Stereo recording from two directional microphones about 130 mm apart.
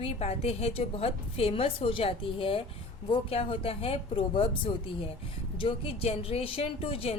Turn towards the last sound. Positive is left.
turn(degrees=45)  # may be behind; listen again after turning